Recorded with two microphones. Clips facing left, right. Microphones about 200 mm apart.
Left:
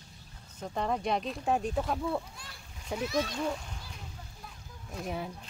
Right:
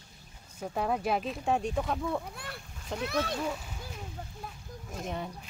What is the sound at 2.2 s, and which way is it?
A child's voice, 60° right (ahead or behind).